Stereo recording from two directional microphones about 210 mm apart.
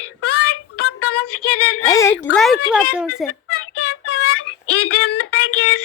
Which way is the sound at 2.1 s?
Centre (ahead or behind).